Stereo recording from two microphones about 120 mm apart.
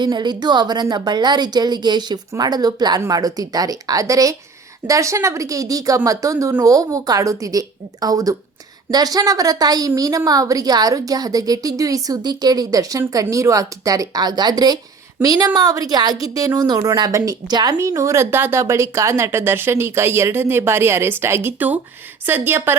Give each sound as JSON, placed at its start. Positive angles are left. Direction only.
{"t": 0.0, "sound": "a woman's voice", "side_deg": -35}